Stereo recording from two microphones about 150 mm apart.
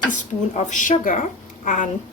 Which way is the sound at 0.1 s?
55° left (ahead or behind).